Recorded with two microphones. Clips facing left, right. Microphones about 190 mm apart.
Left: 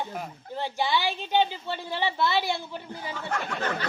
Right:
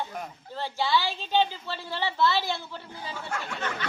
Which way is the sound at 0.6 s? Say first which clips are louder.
Even; 15° left (ahead or behind).